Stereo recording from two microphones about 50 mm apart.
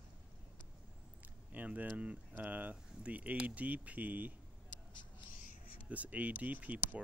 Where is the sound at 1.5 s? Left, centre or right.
Right.